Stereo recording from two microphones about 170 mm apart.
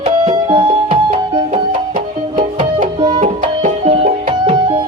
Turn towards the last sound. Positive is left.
turn(degrees=-40)  # may be behind; listen again after turning